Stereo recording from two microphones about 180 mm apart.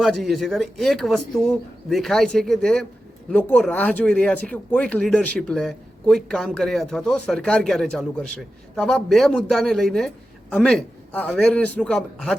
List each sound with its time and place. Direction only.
0.0 s speech: centre (ahead or behind)